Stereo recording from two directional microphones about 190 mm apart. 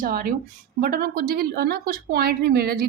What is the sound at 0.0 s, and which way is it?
A woman's voice, 50° right (ahead or behind).